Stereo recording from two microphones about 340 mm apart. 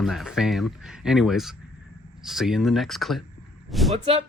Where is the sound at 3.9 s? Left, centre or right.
Centre.